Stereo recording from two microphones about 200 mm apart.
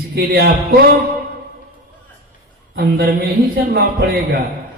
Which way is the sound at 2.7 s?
55° right (ahead or behind).